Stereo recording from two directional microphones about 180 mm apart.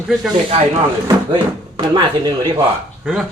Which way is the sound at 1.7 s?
25° right (ahead or behind).